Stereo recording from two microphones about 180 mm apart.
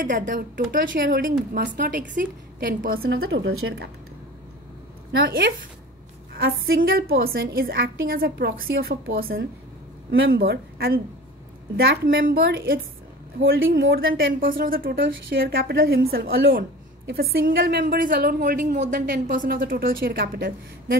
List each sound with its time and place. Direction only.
0.0 s a woman's voice: 45° right (ahead or behind)
3.1 s a woman's voice: 80° right
6.3 s a woman's voice: 55° right (ahead or behind)
10.1 s a woman's voice: 65° right (ahead or behind)
13.4 s a woman's voice: 90° right; by 21.0 s 55° right (ahead or behind)